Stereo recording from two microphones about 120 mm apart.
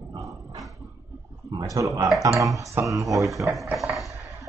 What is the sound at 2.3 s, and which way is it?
Speech, 30° right (ahead or behind).